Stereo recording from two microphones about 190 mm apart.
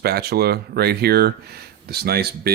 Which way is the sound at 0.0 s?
55° right (ahead or behind).